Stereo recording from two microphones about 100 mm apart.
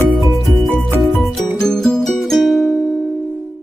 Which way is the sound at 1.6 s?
5° left (ahead or behind).